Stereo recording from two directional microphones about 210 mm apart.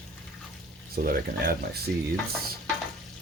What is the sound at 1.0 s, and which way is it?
Speech, 40° right (ahead or behind).